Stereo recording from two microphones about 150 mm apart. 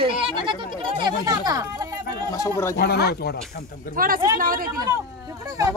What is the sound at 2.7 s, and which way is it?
Speech, 90° left.